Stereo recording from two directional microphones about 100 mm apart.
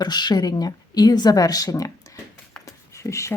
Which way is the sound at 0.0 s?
45° left (ahead or behind).